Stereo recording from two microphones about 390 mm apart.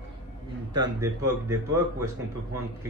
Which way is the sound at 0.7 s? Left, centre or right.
Centre.